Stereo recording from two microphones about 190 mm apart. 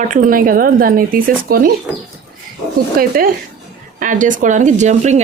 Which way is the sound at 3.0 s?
50° right (ahead or behind).